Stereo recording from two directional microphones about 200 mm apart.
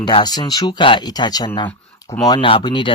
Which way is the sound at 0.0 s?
20° left (ahead or behind).